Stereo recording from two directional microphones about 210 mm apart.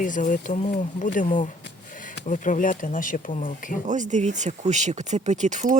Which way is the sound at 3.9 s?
35° right (ahead or behind).